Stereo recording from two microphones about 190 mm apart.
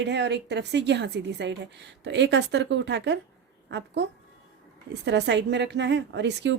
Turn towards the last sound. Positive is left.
turn(degrees=-65)  # may be behind; listen again after turning